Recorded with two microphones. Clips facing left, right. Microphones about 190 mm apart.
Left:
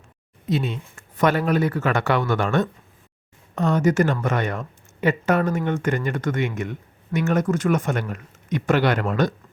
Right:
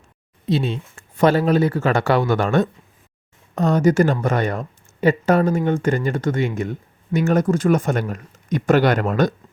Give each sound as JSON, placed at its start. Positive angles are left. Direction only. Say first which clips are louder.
{"t": 0.4, "sound": "speech", "louder": "right 3 dB", "side_deg": -30}